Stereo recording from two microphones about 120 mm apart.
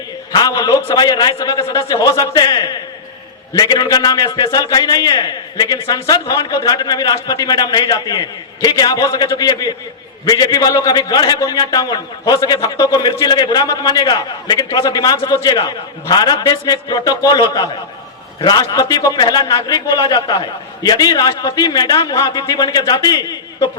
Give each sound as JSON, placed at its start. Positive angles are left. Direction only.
{"t": 0.3, "sound": "a man's voice", "side_deg": 35}